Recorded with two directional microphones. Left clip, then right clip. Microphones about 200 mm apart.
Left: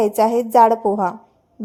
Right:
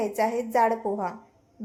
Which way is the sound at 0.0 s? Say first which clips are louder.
Left 10 dB; 40° left (ahead or behind).